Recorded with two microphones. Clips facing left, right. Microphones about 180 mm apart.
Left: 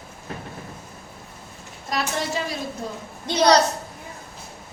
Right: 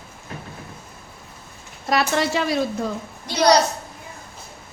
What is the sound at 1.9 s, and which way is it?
Speech, 75° right (ahead or behind).